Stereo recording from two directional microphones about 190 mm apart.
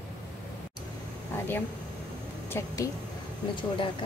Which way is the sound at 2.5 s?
15° left (ahead or behind).